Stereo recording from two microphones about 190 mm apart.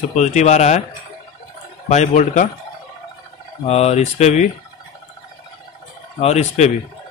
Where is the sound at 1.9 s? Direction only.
40° left (ahead or behind).